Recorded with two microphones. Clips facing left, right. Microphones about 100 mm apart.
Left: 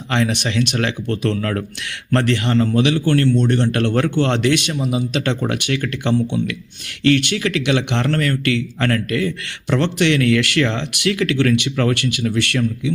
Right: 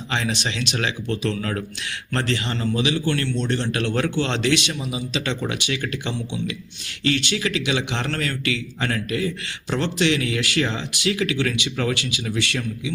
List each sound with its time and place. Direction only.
0.1 s speech: 60° left (ahead or behind)